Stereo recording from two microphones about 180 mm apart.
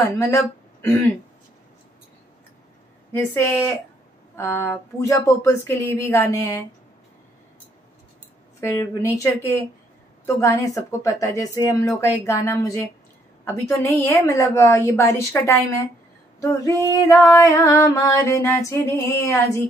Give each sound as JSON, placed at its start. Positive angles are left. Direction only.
{"t": 0.1, "sound": "female singing", "side_deg": 15}
{"t": 3.1, "sound": "female singing", "side_deg": 15}
{"t": 8.5, "sound": "female singing", "side_deg": 15}
{"t": 10.2, "sound": "female singing", "side_deg": 15}